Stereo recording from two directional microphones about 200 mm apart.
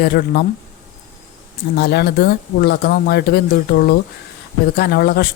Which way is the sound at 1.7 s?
55° left (ahead or behind).